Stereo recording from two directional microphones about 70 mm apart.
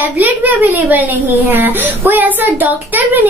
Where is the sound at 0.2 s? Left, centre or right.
Right.